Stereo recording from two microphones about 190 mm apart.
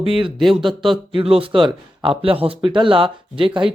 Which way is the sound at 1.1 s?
30° right (ahead or behind).